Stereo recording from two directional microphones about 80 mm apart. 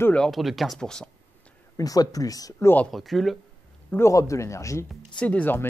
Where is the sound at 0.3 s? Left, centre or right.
Centre.